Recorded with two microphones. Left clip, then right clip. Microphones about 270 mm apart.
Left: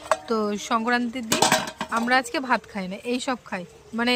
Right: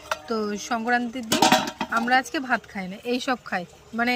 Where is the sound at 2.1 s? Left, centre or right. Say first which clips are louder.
Left 1 dB; centre.